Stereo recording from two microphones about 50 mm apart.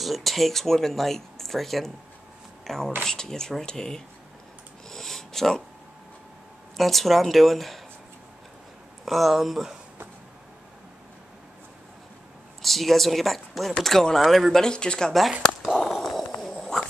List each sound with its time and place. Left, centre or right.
0.0 s speech: centre
4.8 s a sound: centre
6.8 s speech: centre
9.0 s speech: centre
12.6 s speech: centre
14.6 s speech: centre
15.6 s a sound: centre